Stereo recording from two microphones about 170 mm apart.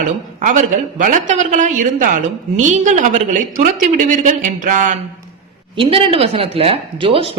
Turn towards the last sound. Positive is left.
turn(degrees=-30)  # may be behind; listen again after turning